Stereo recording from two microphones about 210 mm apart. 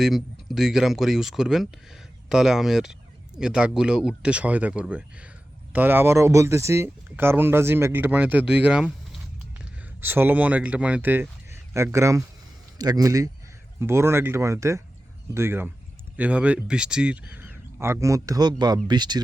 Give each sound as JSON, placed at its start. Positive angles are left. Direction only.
{"t": 0.0, "sound": "speech", "side_deg": 0}
{"t": 10.0, "sound": "speech", "side_deg": -10}